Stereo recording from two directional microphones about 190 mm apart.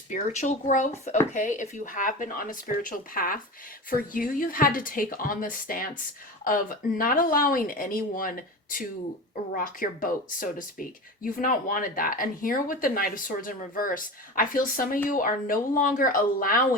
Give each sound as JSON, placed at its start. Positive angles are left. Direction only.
{"t": 0.1, "sound": "speech", "side_deg": 40}
{"t": 7.0, "sound": "speech", "side_deg": 45}